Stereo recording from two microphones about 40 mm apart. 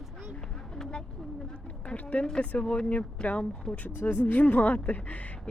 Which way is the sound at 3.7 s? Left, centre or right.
Left.